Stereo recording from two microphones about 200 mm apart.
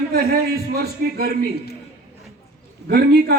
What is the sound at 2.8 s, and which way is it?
Speech, 55° right (ahead or behind).